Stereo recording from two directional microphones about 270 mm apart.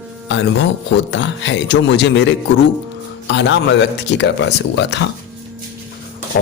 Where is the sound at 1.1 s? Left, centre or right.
Left.